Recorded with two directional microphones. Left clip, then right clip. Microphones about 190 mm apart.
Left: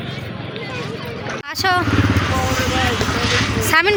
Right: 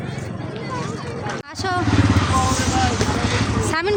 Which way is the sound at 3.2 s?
55° right (ahead or behind).